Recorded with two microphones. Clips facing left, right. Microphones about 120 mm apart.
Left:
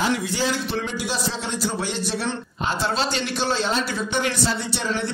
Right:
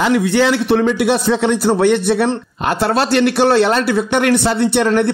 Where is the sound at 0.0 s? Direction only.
70° right (ahead or behind).